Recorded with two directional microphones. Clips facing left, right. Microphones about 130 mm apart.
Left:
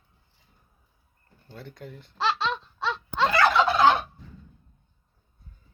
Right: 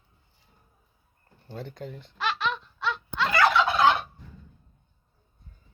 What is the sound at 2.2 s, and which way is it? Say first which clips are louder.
Wail: left 2 dB; 30° left (ahead or behind).